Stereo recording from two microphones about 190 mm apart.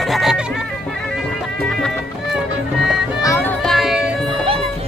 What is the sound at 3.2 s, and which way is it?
Music, 15° left (ahead or behind).